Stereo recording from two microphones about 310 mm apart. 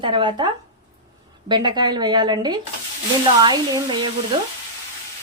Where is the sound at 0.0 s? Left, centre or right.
Centre.